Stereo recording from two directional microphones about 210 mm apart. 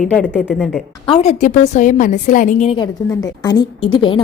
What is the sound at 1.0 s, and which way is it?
A woman's voice, 30° left (ahead or behind).